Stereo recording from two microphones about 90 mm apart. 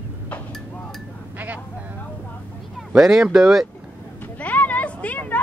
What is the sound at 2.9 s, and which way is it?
Speech, 5° right (ahead or behind).